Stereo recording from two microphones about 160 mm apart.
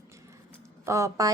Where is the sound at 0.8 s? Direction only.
20° right (ahead or behind).